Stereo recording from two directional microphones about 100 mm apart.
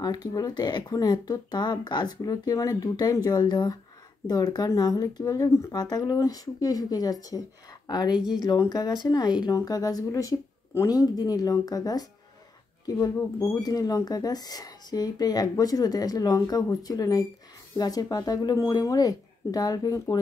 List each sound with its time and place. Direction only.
0.0 s speech: 40° left (ahead or behind)